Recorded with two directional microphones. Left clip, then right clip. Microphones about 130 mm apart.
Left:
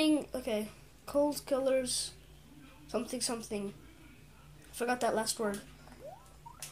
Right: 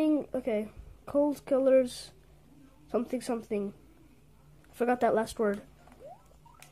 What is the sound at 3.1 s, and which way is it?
Speech, 55° right (ahead or behind).